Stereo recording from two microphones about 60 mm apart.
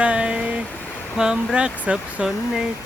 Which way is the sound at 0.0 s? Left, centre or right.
Centre.